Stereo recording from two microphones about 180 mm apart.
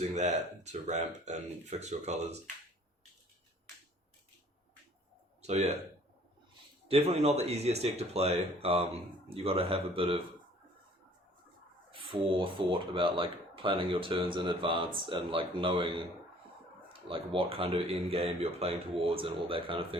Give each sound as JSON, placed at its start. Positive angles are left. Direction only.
{"t": 0.2, "sound": "speech", "side_deg": -40}
{"t": 5.4, "sound": "a man's voice", "side_deg": -35}
{"t": 6.8, "sound": "speech", "side_deg": -35}
{"t": 11.9, "sound": "speech", "side_deg": -30}
{"t": 17.1, "sound": "speech", "side_deg": -30}